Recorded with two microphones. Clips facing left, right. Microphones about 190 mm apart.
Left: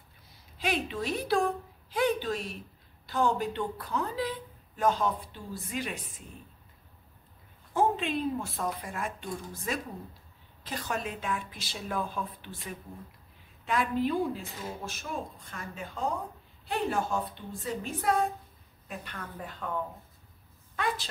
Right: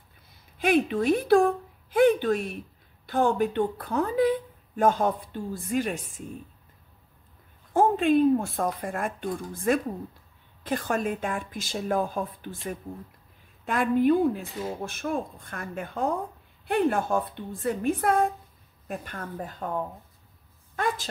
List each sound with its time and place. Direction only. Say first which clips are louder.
0.6 s a woman's voice: right 9 dB; 55° right (ahead or behind)
7.7 s speech: right 7 dB; 50° right (ahead or behind)
20.7 s a sound: right 4 dB; 45° right (ahead or behind)